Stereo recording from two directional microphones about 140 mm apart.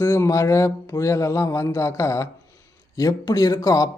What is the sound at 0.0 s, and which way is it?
Speech, 20° left (ahead or behind).